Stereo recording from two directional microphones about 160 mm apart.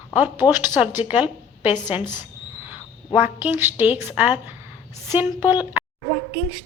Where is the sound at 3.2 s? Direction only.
10° right (ahead or behind).